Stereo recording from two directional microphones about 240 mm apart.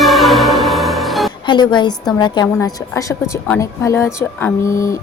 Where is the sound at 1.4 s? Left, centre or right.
Centre.